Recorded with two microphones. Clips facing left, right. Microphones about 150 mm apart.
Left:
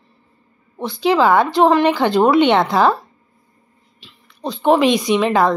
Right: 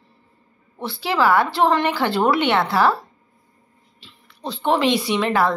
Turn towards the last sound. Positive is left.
turn(degrees=20)  # may be behind; listen again after turning